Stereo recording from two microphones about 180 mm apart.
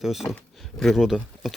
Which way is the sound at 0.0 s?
Centre (ahead or behind).